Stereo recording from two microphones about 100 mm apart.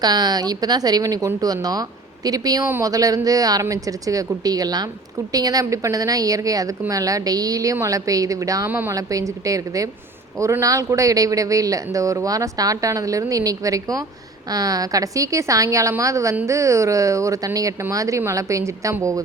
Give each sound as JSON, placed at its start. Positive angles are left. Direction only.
{"t": 0.0, "sound": "speech", "side_deg": -45}